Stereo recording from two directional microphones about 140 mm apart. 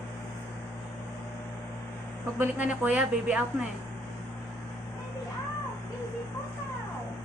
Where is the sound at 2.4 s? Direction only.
10° right (ahead or behind).